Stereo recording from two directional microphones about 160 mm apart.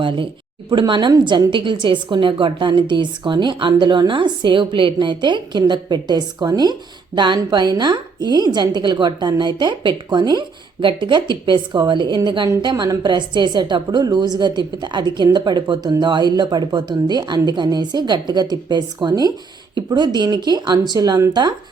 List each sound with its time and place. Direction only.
0.0 s a woman's voice: 30° right (ahead or behind)